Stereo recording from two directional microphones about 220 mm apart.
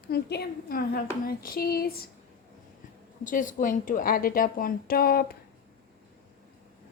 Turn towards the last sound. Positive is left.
turn(degrees=45)  # may be behind; listen again after turning